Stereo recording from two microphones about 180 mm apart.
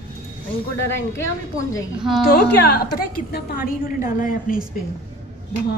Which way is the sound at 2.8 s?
55° left (ahead or behind).